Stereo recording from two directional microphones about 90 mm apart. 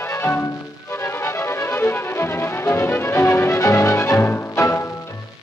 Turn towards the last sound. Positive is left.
turn(degrees=30)  # may be behind; listen again after turning